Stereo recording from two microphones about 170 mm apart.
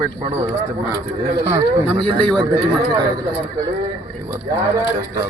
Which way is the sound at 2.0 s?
30° right (ahead or behind).